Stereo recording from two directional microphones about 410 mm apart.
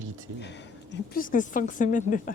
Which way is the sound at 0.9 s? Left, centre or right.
Centre.